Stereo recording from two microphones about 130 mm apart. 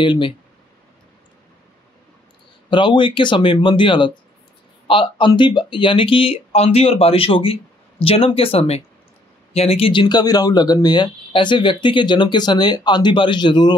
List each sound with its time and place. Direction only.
0.0 s speech: 40° left (ahead or behind)
2.7 s speech: 40° left (ahead or behind)